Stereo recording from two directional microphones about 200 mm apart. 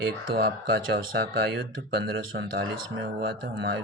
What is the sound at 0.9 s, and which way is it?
Speech, 65° right (ahead or behind).